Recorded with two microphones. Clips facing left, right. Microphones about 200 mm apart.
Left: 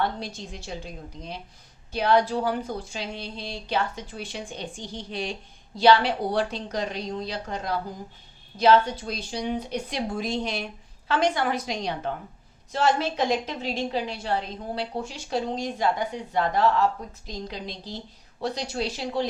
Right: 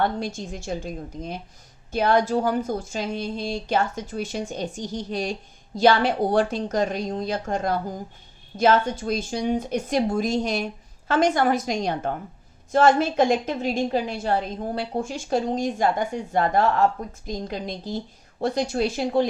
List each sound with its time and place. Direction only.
0.0 s speech: 50° right (ahead or behind)